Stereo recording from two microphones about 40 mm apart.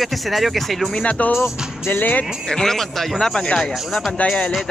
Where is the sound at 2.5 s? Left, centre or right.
Centre.